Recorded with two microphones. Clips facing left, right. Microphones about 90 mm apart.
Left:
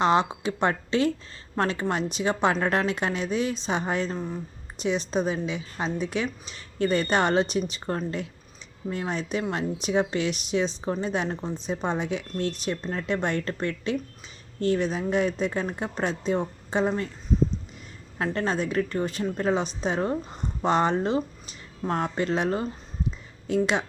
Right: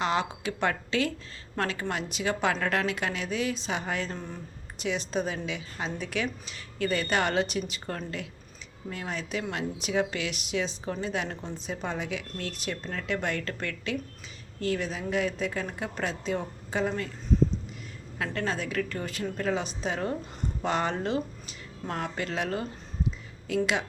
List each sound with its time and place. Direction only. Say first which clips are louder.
0.0 s a woman's voice: left 6 dB; 30° left (ahead or behind)
18.2 s a woman's voice: left 5 dB; 35° left (ahead or behind)
21.8 s speech: left 6 dB; 30° left (ahead or behind)